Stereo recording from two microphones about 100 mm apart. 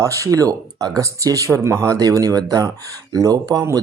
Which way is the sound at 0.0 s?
30° right (ahead or behind).